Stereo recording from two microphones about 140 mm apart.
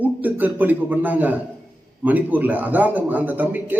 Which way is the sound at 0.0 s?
10° right (ahead or behind).